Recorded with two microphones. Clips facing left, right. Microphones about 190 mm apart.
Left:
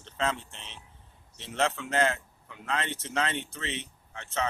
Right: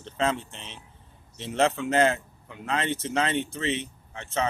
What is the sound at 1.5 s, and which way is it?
Speech, 15° right (ahead or behind).